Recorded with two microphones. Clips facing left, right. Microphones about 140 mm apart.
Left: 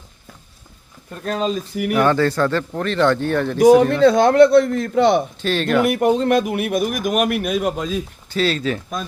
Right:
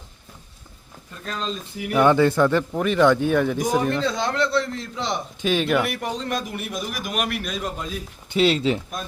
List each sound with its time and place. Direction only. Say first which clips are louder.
1.1 s speech: left 8 dB; 55° left (ahead or behind)
2.0 s a man's voice: right 1 dB; 20° right (ahead or behind)
3.6 s a man's voice: left 11 dB; 60° left (ahead or behind)
5.4 s a man's voice: left 2 dB; 10° right (ahead or behind)
5.8 s a man's voice: left 11 dB; 50° left (ahead or behind); by 8.0 s 90° left
8.3 s speech: right 1 dB; 20° right (ahead or behind)